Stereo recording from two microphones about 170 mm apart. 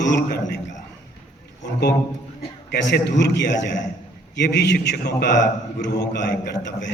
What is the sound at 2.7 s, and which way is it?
A man's voice, 90° left.